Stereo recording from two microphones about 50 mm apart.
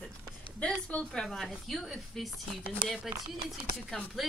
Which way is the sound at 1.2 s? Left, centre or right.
Centre.